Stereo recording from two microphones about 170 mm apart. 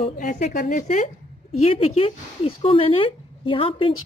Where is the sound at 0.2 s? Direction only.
50° left (ahead or behind).